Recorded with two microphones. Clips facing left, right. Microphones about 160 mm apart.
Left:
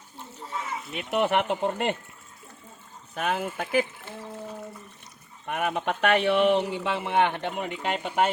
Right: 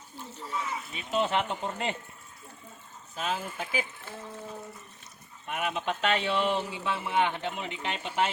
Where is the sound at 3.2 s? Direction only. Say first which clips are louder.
Left 5 dB; 60° left (ahead or behind).